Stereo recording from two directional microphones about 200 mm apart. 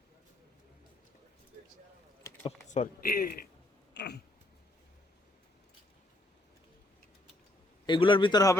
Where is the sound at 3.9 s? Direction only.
55° left (ahead or behind).